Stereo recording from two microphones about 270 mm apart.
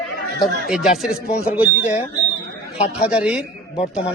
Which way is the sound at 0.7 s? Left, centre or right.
Centre.